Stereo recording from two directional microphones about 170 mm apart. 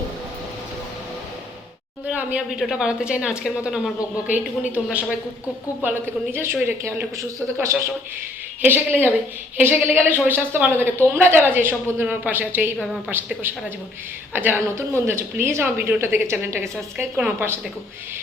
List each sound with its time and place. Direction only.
2.0 s a woman's voice: 5° right (ahead or behind)
6.3 s a woman's voice: 15° right (ahead or behind)